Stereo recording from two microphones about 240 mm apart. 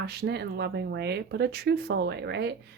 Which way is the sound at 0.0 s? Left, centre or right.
Right.